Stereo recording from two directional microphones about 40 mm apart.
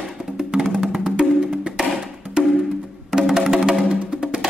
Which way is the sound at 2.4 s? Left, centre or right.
Right.